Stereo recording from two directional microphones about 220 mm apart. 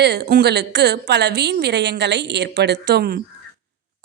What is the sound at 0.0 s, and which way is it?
Speech, 50° right (ahead or behind).